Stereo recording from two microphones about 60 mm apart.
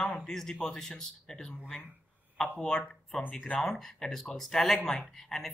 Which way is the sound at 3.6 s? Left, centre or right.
Centre.